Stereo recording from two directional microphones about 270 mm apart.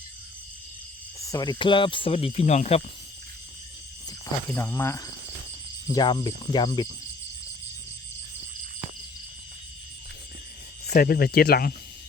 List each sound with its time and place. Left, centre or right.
1.2 s speech: centre
4.5 s cricket: centre
10.8 s speech: left